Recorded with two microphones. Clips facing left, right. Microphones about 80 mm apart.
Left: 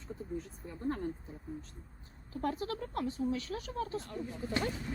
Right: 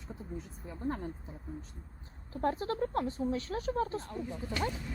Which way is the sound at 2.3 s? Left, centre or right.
Right.